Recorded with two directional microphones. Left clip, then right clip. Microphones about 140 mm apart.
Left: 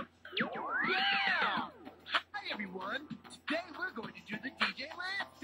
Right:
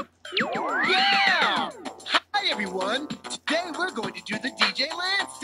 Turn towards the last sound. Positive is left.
turn(degrees=-45)  # may be behind; listen again after turning